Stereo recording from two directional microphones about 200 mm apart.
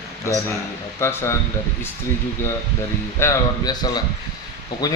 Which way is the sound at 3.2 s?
15° left (ahead or behind).